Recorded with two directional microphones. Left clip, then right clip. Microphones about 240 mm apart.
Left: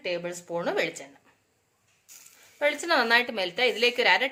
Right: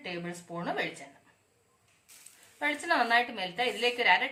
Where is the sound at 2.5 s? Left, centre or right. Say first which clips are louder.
Left 4 dB; left.